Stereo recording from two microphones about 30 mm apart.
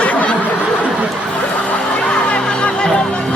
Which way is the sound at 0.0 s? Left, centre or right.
Left.